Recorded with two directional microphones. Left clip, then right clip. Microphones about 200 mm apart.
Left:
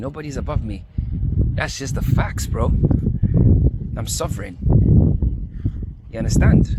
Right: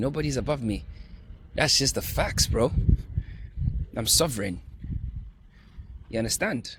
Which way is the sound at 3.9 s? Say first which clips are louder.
Right 6 dB; 25° right (ahead or behind).